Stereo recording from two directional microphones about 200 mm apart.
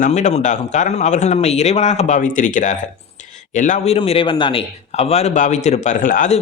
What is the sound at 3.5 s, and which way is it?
A man's voice, 40° left (ahead or behind).